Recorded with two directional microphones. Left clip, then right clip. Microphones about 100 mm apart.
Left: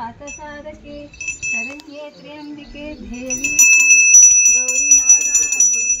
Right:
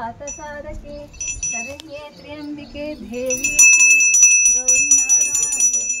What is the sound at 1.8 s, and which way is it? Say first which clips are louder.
Speech: even; 25° right (ahead or behind).